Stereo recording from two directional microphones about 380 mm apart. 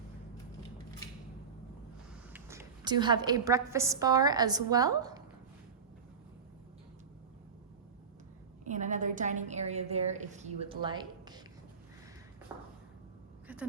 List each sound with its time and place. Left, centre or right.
2.3 s a woman's voice: centre
8.6 s a woman's voice: centre
12.5 s a sound: centre